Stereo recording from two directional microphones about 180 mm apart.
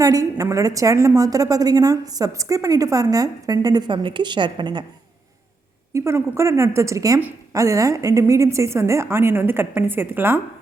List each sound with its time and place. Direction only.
0.0 s a woman's voice: 20° right (ahead or behind)
5.9 s a woman's voice: 15° right (ahead or behind)